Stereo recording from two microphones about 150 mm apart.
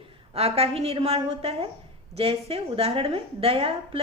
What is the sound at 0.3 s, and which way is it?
A woman's voice, 40° right (ahead or behind).